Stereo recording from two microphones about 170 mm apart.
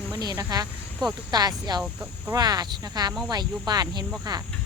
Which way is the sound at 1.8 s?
5° right (ahead or behind).